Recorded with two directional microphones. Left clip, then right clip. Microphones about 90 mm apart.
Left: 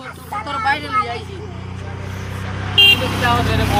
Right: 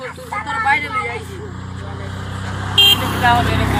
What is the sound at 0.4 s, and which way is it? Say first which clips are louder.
Vehicle: right 3 dB; 35° left (ahead or behind).